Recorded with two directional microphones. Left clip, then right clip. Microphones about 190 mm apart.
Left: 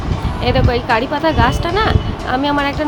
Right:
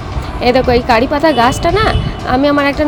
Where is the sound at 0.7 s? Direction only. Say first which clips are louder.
Right 5 dB; 25° right (ahead or behind).